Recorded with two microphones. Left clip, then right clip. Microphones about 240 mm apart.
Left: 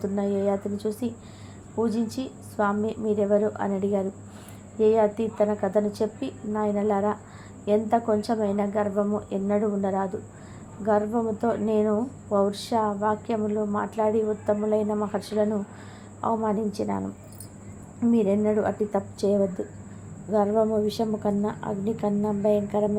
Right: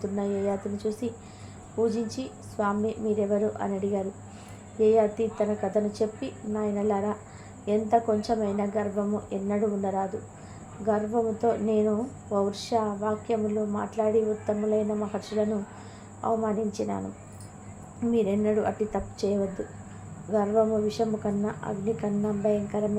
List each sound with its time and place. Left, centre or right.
0.0 s a woman's voice: left
18.1 s a woman's voice: left